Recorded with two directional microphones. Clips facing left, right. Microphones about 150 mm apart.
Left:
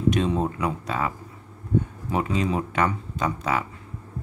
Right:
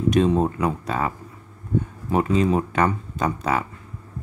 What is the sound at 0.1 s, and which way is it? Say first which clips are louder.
Speech: right 5 dB; 45° right (ahead or behind).